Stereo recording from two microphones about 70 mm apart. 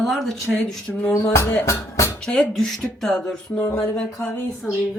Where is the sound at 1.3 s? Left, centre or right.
Left.